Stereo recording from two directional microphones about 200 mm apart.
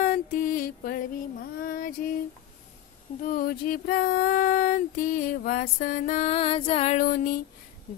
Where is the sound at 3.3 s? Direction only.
45° left (ahead or behind).